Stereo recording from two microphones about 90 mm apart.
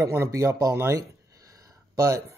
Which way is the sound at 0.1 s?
30° right (ahead or behind).